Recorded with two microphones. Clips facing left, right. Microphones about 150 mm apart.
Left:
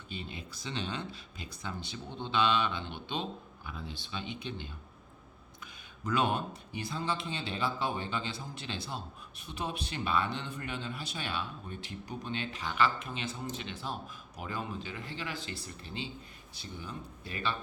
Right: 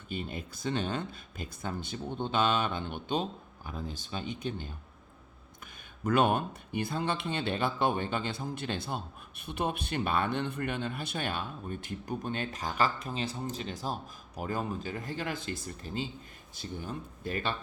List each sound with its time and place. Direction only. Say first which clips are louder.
0.1 s speech: right 6 dB; 50° right (ahead or behind)
6.1 s speech: right 4 dB; 55° right (ahead or behind)